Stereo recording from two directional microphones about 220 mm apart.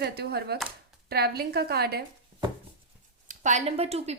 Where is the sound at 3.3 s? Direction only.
35° right (ahead or behind).